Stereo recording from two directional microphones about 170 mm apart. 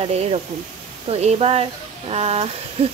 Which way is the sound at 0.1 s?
40° right (ahead or behind).